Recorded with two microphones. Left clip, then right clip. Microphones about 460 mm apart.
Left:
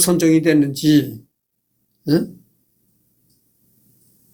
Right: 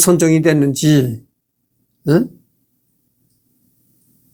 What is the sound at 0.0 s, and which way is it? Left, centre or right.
Speech, right.